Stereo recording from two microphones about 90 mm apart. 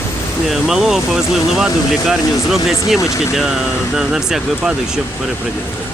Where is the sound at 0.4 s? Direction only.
5° right (ahead or behind).